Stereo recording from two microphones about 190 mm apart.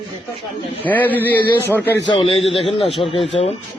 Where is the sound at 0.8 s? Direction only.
10° left (ahead or behind).